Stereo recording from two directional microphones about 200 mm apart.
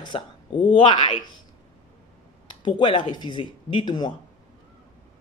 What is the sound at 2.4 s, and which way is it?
Speech, 20° left (ahead or behind).